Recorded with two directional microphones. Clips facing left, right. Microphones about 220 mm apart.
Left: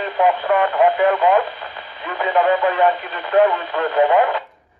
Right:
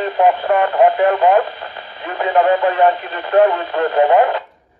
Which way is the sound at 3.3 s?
40° right (ahead or behind).